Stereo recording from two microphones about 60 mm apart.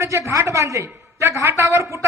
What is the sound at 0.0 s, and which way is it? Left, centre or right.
A woman's voice, right.